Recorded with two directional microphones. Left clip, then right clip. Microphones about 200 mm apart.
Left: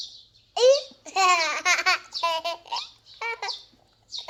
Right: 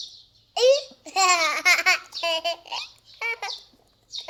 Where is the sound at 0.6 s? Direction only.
Centre (ahead or behind).